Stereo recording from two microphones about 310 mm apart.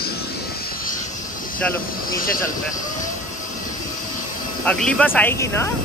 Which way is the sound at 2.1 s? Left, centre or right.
Left.